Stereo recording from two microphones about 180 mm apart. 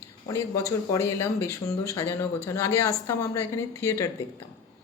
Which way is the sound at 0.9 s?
15° left (ahead or behind).